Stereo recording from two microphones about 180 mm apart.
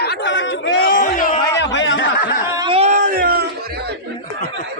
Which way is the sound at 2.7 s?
40° right (ahead or behind).